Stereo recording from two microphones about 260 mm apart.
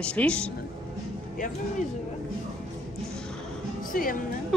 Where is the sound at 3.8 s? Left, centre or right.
Left.